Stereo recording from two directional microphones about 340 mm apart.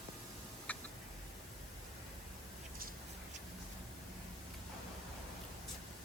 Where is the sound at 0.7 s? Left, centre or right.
Centre.